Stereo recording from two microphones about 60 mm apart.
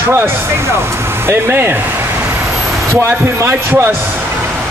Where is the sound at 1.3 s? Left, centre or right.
Right.